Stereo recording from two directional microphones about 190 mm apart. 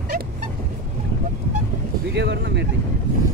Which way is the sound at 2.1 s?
65° right (ahead or behind).